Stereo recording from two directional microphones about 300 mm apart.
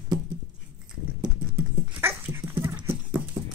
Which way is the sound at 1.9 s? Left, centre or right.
Centre.